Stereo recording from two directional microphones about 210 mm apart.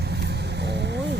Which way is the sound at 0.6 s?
55° right (ahead or behind).